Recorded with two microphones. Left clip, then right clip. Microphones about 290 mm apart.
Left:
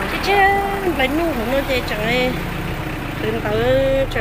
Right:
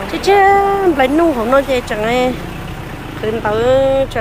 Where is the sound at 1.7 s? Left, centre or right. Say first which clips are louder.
Right 4 dB; centre.